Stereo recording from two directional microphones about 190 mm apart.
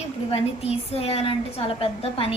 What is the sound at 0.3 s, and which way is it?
A woman's voice, 30° left (ahead or behind).